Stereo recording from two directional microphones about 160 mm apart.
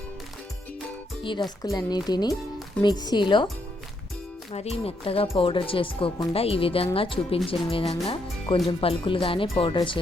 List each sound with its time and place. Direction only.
1.2 s speech: 30° left (ahead or behind)
4.5 s speech: 40° left (ahead or behind)